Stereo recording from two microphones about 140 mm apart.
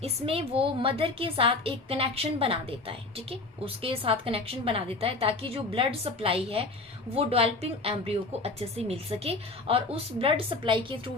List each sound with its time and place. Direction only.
0.0 s a woman's voice: 45° right (ahead or behind)